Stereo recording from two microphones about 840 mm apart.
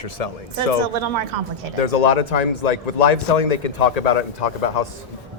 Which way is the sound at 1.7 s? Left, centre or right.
Left.